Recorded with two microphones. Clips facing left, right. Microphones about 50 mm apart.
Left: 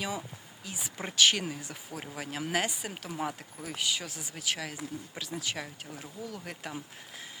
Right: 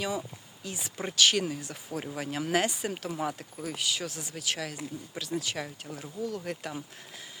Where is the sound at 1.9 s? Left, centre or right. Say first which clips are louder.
Right 5 dB; centre.